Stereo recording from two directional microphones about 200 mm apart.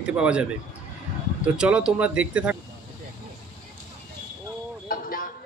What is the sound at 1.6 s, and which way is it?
Speech, 5° right (ahead or behind).